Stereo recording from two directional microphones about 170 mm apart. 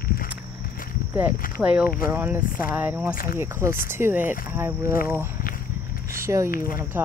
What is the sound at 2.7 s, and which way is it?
Speech, 10° right (ahead or behind).